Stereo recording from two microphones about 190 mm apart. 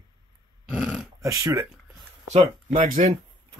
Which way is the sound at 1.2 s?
20° right (ahead or behind).